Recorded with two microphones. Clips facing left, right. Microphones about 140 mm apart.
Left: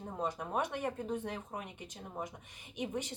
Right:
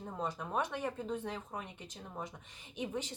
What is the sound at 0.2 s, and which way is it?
Speech, 15° left (ahead or behind).